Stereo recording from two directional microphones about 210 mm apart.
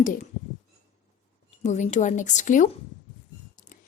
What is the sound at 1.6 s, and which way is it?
A woman's voice, 35° left (ahead or behind).